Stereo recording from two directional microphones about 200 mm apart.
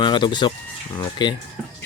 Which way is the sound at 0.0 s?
25° left (ahead or behind).